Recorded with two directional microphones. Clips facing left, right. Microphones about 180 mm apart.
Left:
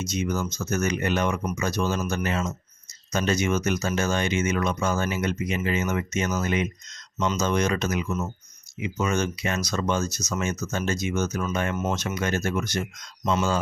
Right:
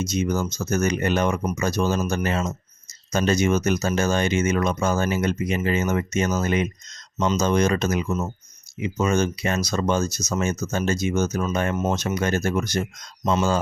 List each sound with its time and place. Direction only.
0.0 s speech: 35° right (ahead or behind)